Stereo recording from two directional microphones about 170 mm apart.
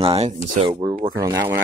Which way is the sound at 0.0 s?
35° right (ahead or behind).